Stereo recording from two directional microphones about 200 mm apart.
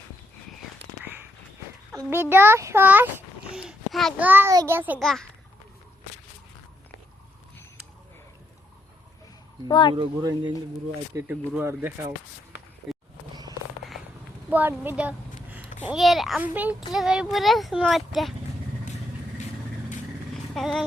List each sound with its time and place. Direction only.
1.9 s a sound: 10° right (ahead or behind)
2.3 s a child's voice: 10° right (ahead or behind)
4.3 s speech: 10° right (ahead or behind)
4.9 s speech: centre (ahead or behind)
9.6 s speech: 25° left (ahead or behind)
9.9 s speech: 20° right (ahead or behind)
11.1 s speech: 10° right (ahead or behind)
12.8 s a sound: centre (ahead or behind)
14.5 s a woman's voice: 10° right (ahead or behind)
20.3 s vehicle: centre (ahead or behind)